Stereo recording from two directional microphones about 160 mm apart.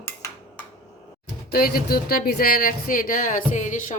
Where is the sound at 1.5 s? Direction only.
70° left (ahead or behind).